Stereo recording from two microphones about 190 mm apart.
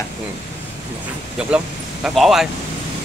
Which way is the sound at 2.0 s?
Centre (ahead or behind).